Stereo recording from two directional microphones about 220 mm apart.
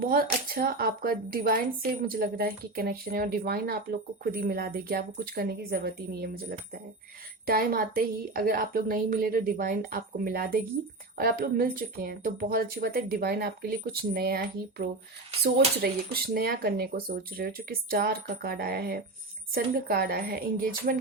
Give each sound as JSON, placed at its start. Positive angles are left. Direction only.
{"t": 0.0, "sound": "a woman's voice", "side_deg": -40}